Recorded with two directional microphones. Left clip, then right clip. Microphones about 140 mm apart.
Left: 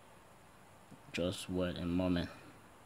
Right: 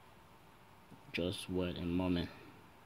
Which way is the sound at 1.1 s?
25° left (ahead or behind).